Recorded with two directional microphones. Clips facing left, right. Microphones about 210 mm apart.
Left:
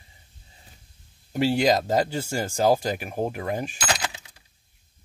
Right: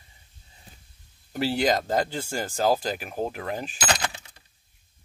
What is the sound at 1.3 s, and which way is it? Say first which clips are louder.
Speech: left 3 dB; 10° left (ahead or behind).